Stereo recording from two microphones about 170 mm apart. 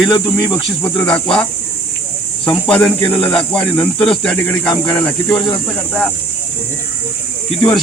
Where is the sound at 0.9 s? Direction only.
5° left (ahead or behind).